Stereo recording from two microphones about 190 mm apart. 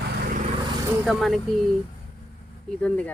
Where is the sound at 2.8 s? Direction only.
5° left (ahead or behind).